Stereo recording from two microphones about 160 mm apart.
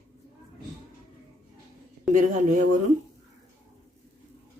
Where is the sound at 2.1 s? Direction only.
55° right (ahead or behind).